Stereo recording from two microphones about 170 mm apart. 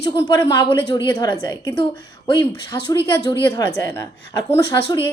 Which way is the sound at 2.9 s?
15° left (ahead or behind).